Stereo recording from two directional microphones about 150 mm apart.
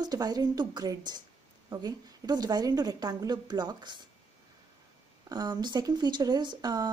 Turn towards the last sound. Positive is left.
turn(degrees=-25)  # may be behind; listen again after turning